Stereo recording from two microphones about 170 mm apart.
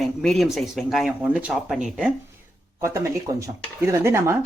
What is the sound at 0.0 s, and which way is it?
Speech, centre (ahead or behind).